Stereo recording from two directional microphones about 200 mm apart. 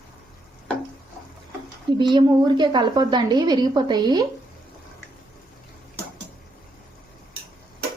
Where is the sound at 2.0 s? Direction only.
20° right (ahead or behind).